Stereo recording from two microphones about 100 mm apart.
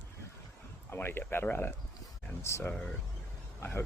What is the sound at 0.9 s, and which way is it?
Speech, 20° left (ahead or behind).